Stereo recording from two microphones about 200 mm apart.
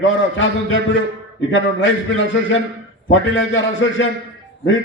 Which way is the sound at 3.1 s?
70° left (ahead or behind).